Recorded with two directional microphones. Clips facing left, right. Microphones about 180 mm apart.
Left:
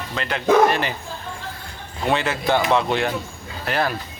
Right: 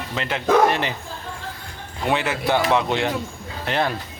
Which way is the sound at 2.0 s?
15° right (ahead or behind).